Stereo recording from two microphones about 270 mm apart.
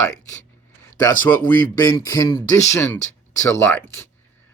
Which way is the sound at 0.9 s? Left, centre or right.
Centre.